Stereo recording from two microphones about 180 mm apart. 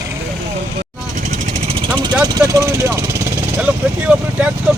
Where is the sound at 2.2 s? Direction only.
20° right (ahead or behind).